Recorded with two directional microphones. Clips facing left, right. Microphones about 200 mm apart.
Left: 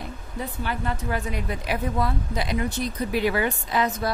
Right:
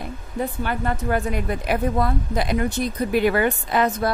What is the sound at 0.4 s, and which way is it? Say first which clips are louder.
A woman's voice: right 5 dB; 50° right (ahead or behind).